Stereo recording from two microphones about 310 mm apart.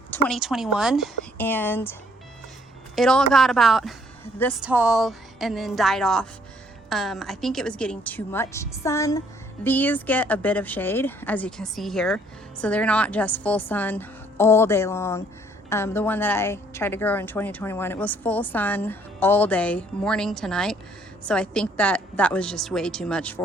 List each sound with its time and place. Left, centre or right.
0.1 s a woman's voice: centre